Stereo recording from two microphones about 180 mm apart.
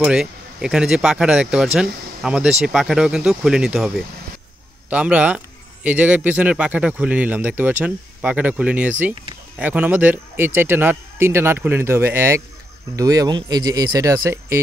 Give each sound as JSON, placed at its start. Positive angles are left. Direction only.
{"t": 0.0, "sound": "speech", "side_deg": -5}